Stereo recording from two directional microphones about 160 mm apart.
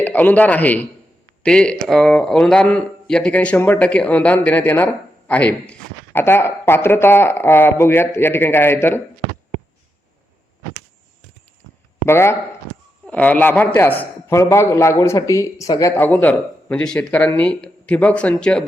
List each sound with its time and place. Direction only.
0.0 s a man's voice: 10° left (ahead or behind)
12.0 s a man's voice: 15° left (ahead or behind)